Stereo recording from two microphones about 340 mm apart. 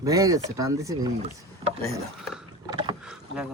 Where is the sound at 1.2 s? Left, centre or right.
Centre.